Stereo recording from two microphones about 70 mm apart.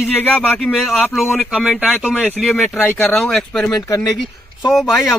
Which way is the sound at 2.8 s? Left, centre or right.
Left.